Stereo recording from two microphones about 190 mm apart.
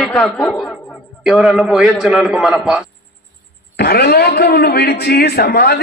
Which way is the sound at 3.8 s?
55° left (ahead or behind).